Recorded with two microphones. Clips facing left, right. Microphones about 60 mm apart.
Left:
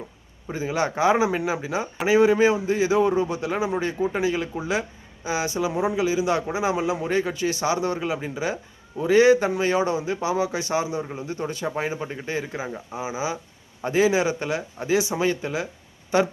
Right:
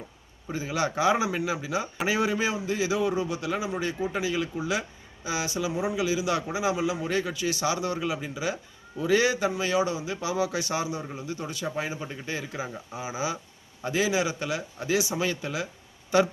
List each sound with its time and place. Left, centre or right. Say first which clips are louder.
0.5 s a man's voice: left 3 dB; left
13.8 s a man's voice: left 6 dB; left